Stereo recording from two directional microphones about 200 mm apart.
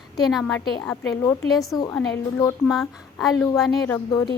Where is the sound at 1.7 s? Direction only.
20° left (ahead or behind).